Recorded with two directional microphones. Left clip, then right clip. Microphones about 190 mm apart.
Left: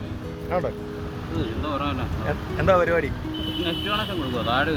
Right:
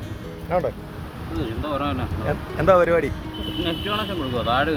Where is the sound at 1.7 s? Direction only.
5° right (ahead or behind).